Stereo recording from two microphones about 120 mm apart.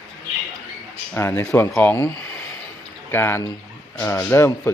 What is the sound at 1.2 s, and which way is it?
Speech, 20° left (ahead or behind).